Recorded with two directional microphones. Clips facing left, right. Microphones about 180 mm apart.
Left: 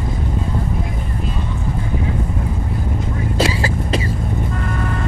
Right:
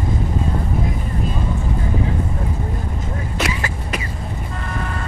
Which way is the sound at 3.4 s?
30° left (ahead or behind).